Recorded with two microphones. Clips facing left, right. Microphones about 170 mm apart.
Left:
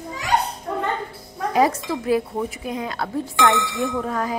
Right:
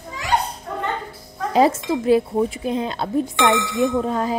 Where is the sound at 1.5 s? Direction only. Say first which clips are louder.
Right 3 dB; 25° right (ahead or behind).